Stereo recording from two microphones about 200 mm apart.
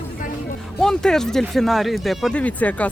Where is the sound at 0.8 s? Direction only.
5° left (ahead or behind).